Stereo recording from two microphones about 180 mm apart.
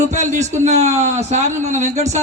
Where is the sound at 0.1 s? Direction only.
40° right (ahead or behind).